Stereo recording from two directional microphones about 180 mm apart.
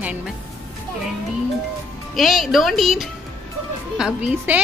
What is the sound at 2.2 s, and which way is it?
A woman's voice, centre (ahead or behind).